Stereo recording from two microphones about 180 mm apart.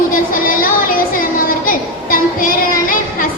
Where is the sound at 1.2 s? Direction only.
50° left (ahead or behind).